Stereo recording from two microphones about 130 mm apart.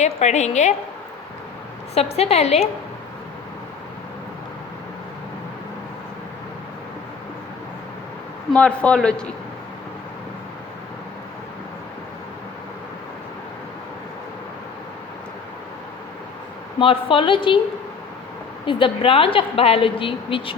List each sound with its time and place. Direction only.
0.0 s a woman's voice: 60° left (ahead or behind)
2.0 s a woman's voice: 50° left (ahead or behind)
8.5 s a man's voice: 10° left (ahead or behind)
16.8 s a woman's voice: 40° left (ahead or behind)
18.6 s a woman's voice: 40° left (ahead or behind)